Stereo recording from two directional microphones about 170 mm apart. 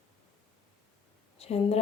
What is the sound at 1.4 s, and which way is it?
Speech, 35° left (ahead or behind).